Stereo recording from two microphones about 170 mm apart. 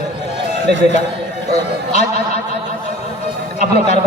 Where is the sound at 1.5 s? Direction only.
40° left (ahead or behind).